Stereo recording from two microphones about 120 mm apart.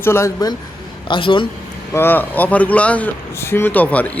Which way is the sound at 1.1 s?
45° left (ahead or behind).